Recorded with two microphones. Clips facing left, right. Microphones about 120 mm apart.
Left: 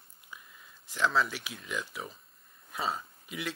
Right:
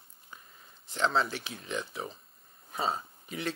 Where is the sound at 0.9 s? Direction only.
30° right (ahead or behind).